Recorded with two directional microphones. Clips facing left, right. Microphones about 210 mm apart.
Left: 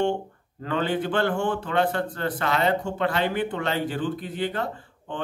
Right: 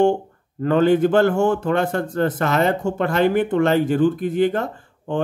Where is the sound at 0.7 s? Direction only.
45° right (ahead or behind).